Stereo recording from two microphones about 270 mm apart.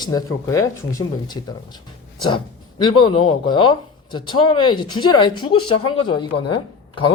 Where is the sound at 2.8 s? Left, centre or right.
Centre.